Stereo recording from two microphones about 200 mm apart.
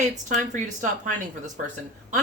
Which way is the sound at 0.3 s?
40° right (ahead or behind).